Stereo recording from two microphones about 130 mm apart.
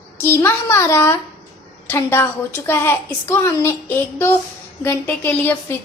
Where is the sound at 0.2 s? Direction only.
20° left (ahead or behind).